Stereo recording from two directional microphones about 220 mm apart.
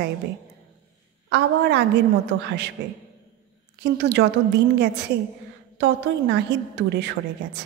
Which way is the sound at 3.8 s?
50° right (ahead or behind).